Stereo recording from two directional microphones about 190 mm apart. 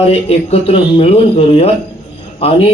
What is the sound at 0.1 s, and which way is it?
Speech, 30° left (ahead or behind).